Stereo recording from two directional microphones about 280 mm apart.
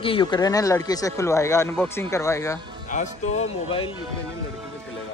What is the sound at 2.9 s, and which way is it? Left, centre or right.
Speech, left.